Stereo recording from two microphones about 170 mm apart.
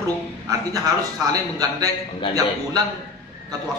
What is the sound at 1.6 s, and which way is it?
Speech, 20° right (ahead or behind).